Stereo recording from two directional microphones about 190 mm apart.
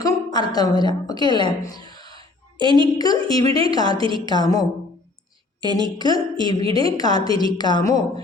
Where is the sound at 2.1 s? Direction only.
25° right (ahead or behind).